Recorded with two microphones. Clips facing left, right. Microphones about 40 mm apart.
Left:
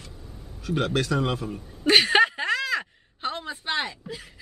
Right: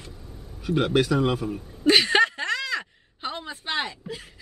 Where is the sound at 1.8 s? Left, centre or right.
Centre.